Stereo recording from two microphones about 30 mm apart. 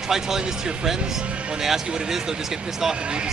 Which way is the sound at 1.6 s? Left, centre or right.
Centre.